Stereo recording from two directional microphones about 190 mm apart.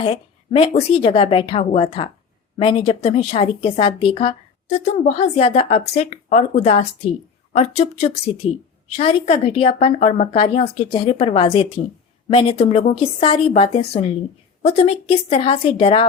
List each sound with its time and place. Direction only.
0.0 s a woman's voice: 30° left (ahead or behind)